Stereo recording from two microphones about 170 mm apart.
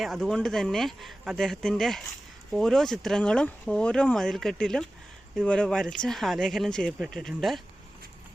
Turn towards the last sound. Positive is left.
turn(degrees=0)  # may be behind; listen again after turning